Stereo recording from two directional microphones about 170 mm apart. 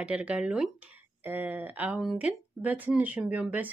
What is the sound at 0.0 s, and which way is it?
Speech, 5° right (ahead or behind).